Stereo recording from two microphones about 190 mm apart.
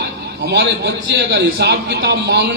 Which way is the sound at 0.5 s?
65° right (ahead or behind).